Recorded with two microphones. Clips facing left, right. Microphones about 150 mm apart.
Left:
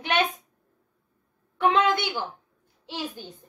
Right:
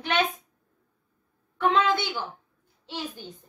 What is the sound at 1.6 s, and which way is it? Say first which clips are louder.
Speech: left 1 dB; 15° left (ahead or behind).